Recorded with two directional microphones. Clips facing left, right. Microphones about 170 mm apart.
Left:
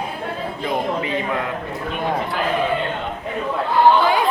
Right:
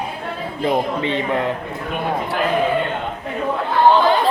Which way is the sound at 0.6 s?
30° right (ahead or behind).